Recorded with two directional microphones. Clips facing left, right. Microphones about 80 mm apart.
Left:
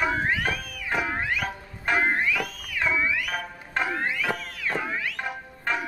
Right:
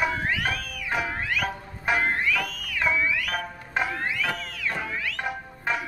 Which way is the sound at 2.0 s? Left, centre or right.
Centre.